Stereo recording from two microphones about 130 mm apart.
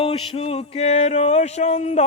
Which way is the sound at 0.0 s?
45° left (ahead or behind).